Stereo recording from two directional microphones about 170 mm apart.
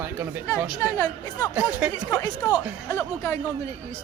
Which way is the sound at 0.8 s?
20° left (ahead or behind).